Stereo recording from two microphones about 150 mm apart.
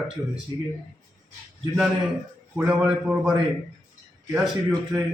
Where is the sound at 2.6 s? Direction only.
10° right (ahead or behind).